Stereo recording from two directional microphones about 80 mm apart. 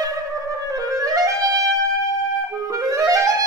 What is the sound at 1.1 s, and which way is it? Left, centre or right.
Clarinet, right.